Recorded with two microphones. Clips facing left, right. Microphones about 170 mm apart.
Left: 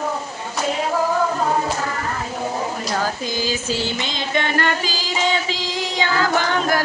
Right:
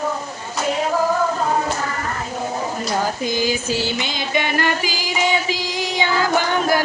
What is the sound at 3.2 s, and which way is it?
Music, 15° right (ahead or behind).